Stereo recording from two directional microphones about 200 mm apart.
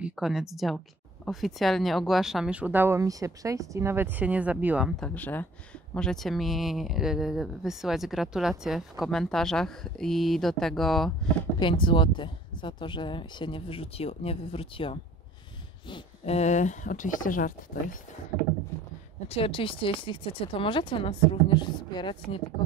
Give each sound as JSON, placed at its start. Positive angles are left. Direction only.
{"t": 0.0, "sound": "a woman's voice", "side_deg": 0}
{"t": 5.0, "sound": "speech", "side_deg": 5}
{"t": 11.6, "sound": "speech", "side_deg": 25}
{"t": 19.2, "sound": "speech", "side_deg": 30}